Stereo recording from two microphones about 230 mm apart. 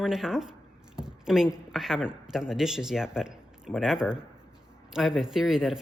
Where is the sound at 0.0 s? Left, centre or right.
Centre.